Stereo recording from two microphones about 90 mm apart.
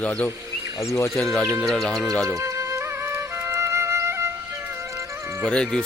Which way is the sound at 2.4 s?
35° right (ahead or behind).